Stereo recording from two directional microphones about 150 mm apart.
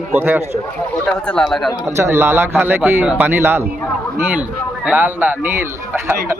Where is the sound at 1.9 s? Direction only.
20° right (ahead or behind).